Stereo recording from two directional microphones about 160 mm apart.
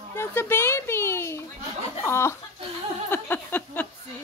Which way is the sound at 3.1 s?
10° left (ahead or behind).